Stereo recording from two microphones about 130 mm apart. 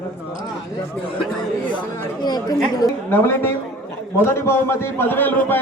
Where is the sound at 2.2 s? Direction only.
30° left (ahead or behind).